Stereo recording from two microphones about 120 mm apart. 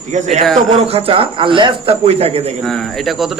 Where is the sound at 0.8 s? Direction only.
55° right (ahead or behind).